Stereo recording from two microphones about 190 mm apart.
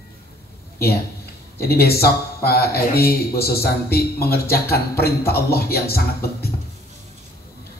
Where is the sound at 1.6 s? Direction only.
55° left (ahead or behind).